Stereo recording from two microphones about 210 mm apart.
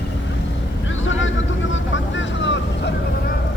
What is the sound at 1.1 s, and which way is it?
Vehicle, 65° left (ahead or behind).